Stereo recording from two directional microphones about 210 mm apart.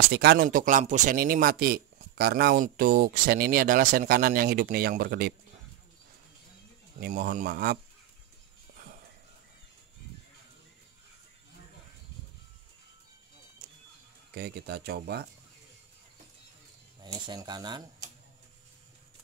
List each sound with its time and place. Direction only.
0.1 s speech: 50° right (ahead or behind)
7.0 s speech: 45° right (ahead or behind)
8.7 s music: 40° right (ahead or behind)
14.3 s speech: 50° right (ahead or behind)
17.0 s speech: 20° right (ahead or behind)